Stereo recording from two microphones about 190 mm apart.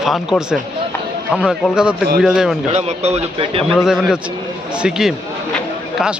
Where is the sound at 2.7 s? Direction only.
35° right (ahead or behind).